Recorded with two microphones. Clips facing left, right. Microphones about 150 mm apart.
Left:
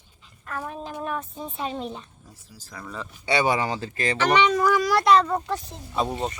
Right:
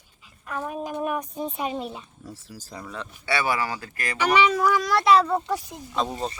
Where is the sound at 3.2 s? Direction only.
20° left (ahead or behind).